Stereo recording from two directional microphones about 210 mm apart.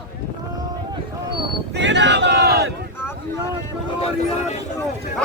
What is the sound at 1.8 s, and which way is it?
Speech, 55° right (ahead or behind).